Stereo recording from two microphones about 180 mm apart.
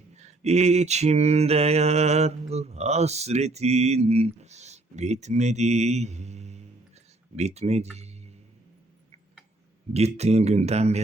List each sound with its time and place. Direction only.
0.2 s mantra: 40° right (ahead or behind)
7.3 s speech: 40° right (ahead or behind)
9.9 s mantra: 35° right (ahead or behind)